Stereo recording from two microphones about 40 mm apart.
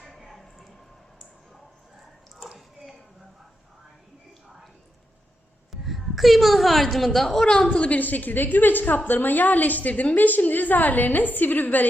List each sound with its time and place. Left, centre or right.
0.0 s a sound: centre
5.7 s a woman's voice: centre
7.4 s a woman's voice: left
7.9 s a woman's voice: left
10.2 s a woman's voice: left